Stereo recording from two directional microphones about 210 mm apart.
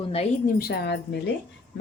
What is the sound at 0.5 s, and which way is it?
Speech, 45° left (ahead or behind).